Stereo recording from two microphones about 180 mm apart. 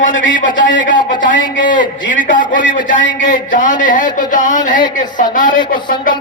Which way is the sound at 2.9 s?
90° left.